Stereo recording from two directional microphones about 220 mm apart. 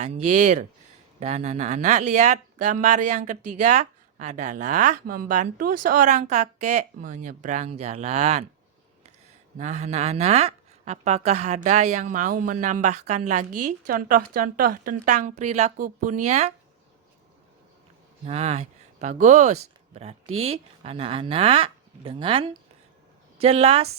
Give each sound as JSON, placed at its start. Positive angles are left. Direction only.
{"t": 0.3, "sound": "speech", "side_deg": -30}
{"t": 9.6, "sound": "speech", "side_deg": -30}
{"t": 18.3, "sound": "speech", "side_deg": -30}
{"t": 19.9, "sound": "a sound", "side_deg": -30}
{"t": 20.4, "sound": "speech", "side_deg": -25}